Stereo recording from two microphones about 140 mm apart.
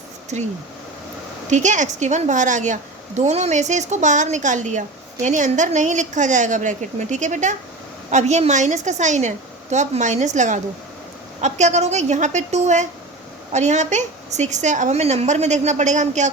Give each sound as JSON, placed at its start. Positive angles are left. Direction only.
{"t": 1.5, "sound": "a woman's voice", "side_deg": -60}